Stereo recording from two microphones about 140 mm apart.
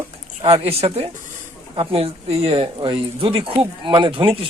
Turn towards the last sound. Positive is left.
turn(degrees=-40)  # may be behind; listen again after turning